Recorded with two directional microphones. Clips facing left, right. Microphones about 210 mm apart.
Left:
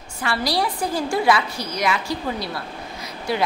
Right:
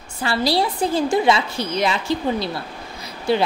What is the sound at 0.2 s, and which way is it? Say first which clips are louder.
A woman's voice: right 3 dB; 30° right (ahead or behind).